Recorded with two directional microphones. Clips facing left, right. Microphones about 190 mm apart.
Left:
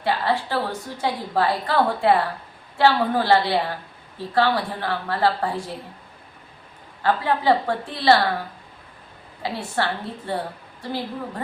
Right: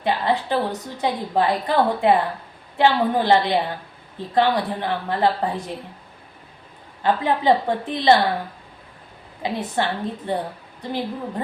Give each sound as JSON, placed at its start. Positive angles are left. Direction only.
{"t": 0.0, "sound": "a woman's voice", "side_deg": -20}
{"t": 7.0, "sound": "a woman's voice", "side_deg": -20}
{"t": 9.4, "sound": "a woman's voice", "side_deg": -20}